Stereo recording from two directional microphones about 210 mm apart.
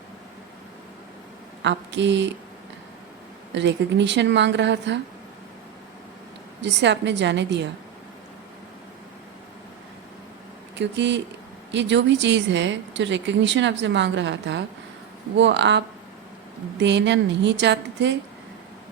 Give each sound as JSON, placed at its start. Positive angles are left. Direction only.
{"t": 1.6, "sound": "a woman's voice", "side_deg": -60}
{"t": 3.5, "sound": "a woman's voice", "side_deg": -55}
{"t": 6.6, "sound": "a woman's voice", "side_deg": -55}
{"t": 10.8, "sound": "a woman's voice", "side_deg": -55}
{"t": 16.8, "sound": "a woman's voice", "side_deg": -60}